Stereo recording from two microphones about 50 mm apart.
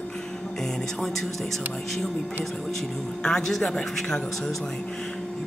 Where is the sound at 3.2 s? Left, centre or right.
Centre.